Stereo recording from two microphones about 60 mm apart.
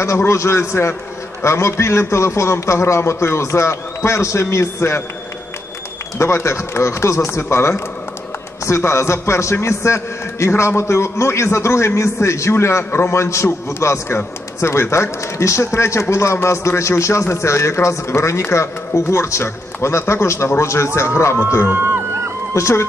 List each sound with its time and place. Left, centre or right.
0.0 s a man's voice: left
6.1 s a man's voice: left